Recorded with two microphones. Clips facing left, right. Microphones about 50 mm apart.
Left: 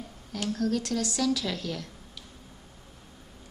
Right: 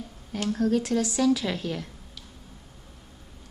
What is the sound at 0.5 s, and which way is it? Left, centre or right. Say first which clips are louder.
A woman's voice: right 4 dB; centre.